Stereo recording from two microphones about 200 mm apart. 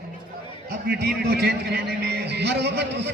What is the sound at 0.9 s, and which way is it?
A man's voice, 55° right (ahead or behind).